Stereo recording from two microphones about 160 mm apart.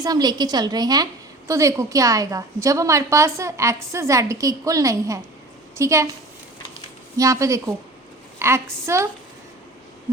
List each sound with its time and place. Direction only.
0.0 s a woman's voice: 25° right (ahead or behind)
7.2 s a woman's voice: 20° right (ahead or behind)